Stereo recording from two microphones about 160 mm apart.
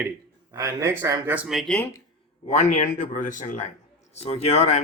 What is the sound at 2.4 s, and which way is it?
A man's voice, 50° left (ahead or behind).